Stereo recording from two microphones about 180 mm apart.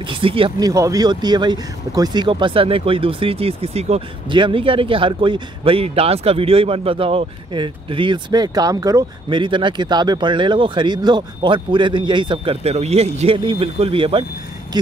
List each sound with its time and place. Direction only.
0.0 s speech: 30° right (ahead or behind)